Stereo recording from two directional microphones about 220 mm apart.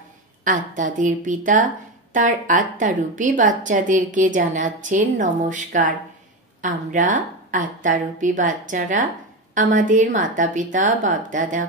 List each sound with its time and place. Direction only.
0.4 s a woman's voice: 35° right (ahead or behind)